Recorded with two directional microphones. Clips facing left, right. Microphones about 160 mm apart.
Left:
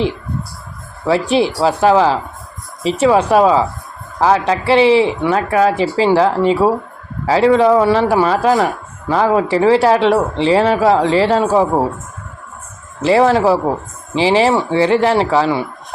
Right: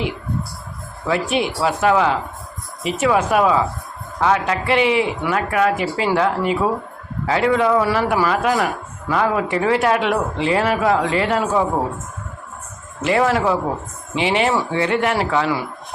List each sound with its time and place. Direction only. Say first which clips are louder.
1.0 s speech: left 6 dB; 30° left (ahead or behind)
13.0 s speech: left 6 dB; 30° left (ahead or behind)